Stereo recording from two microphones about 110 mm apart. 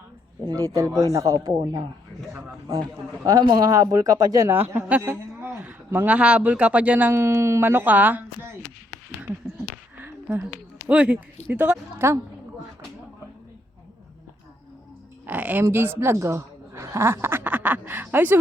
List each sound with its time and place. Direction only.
0.4 s speech: 35° right (ahead or behind)
3.5 s speech: 35° right (ahead or behind)
4.4 s a woman's voice: 20° right (ahead or behind)
10.0 s a sound: 15° right (ahead or behind)
10.8 s a woman's voice: 10° right (ahead or behind)
15.3 s a woman's voice: 15° right (ahead or behind)